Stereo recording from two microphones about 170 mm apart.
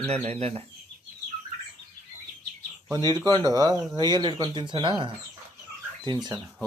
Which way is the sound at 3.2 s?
20° right (ahead or behind).